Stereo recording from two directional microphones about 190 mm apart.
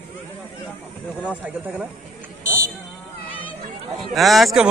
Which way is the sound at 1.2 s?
5° right (ahead or behind).